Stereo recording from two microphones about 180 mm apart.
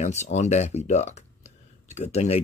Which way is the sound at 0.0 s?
40° left (ahead or behind).